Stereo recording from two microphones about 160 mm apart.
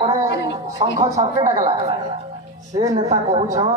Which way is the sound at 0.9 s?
20° right (ahead or behind).